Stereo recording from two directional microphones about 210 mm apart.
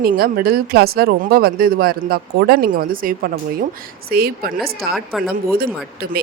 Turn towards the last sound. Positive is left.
turn(degrees=0)  # may be behind; listen again after turning